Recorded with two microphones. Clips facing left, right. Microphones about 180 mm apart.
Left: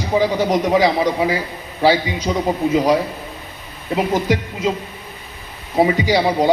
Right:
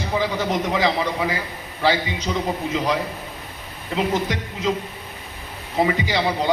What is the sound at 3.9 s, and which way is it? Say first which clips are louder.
Speech: left 5 dB; 10° left (ahead or behind).